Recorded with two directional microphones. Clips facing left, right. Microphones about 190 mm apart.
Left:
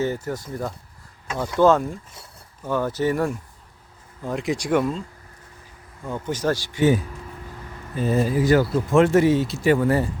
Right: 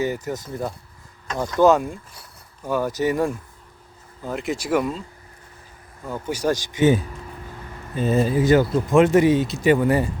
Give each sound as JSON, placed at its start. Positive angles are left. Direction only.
{"t": 0.0, "sound": "speech", "side_deg": -15}
{"t": 4.2, "sound": "speech", "side_deg": 0}
{"t": 6.1, "sound": "speech", "side_deg": -10}